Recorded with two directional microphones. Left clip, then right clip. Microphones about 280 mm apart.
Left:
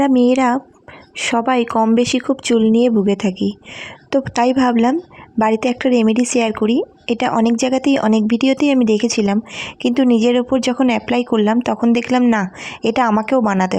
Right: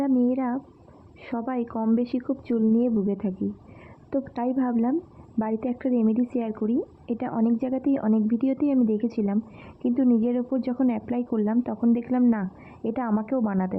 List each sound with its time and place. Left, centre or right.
0.0 s speech: left